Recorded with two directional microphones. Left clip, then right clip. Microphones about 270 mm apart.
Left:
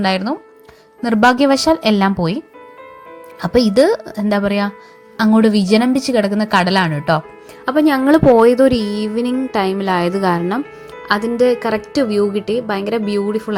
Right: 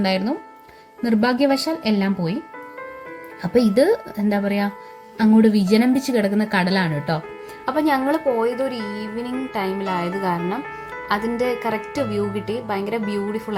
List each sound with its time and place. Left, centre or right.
0.0 s a woman's voice: left
3.4 s a woman's voice: left